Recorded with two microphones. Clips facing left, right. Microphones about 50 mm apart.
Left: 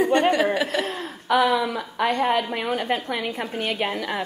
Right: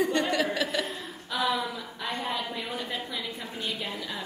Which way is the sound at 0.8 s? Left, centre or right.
Left.